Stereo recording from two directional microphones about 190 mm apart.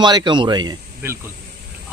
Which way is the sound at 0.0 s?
25° right (ahead or behind).